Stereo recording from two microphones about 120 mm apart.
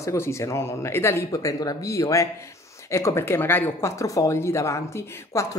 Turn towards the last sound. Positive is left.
turn(degrees=25)  # may be behind; listen again after turning